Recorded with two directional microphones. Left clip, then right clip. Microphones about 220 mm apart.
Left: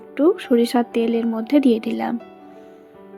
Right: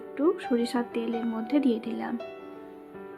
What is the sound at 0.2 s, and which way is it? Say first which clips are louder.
A woman's voice: left 9 dB; 30° left (ahead or behind).